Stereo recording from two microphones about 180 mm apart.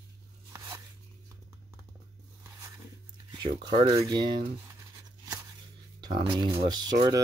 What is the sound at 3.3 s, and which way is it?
Speech, 30° right (ahead or behind).